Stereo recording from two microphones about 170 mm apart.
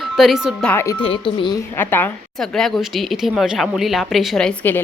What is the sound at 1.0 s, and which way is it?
Speech, 30° left (ahead or behind).